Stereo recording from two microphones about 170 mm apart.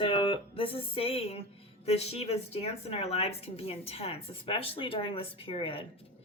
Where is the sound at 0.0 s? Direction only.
30° left (ahead or behind).